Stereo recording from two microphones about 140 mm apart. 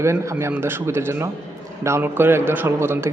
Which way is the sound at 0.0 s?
20° right (ahead or behind).